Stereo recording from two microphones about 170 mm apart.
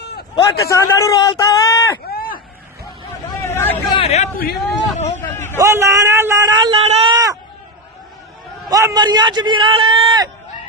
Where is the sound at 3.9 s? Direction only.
35° left (ahead or behind).